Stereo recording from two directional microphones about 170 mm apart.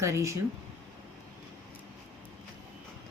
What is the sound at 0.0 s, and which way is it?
Speech, 15° right (ahead or behind).